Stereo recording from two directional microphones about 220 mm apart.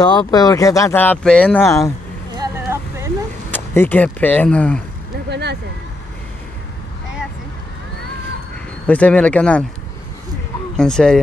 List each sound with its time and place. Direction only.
0.0 s speech: 20° left (ahead or behind)
2.3 s vehicle: 15° right (ahead or behind)
3.5 s speech: 10° left (ahead or behind)
5.3 s a sound: 50° right (ahead or behind)
8.8 s speech: 5° left (ahead or behind)
10.8 s speech: 5° left (ahead or behind)